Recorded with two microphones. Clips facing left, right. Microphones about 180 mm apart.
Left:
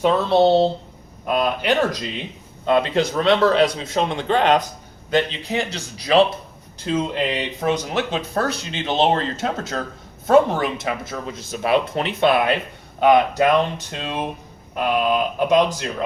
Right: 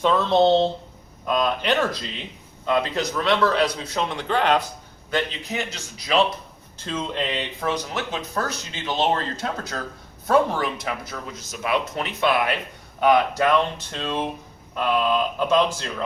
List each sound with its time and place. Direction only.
0.0 s speech: 10° left (ahead or behind)
2.6 s speech: 30° left (ahead or behind)
5.1 s a man's voice: 30° left (ahead or behind)
6.8 s speech: 10° left (ahead or behind)